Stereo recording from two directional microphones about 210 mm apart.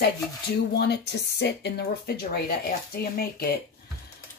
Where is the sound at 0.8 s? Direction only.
50° left (ahead or behind).